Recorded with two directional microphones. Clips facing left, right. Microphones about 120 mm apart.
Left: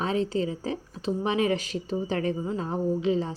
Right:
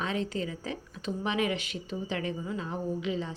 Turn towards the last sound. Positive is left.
turn(degrees=35)  # may be behind; listen again after turning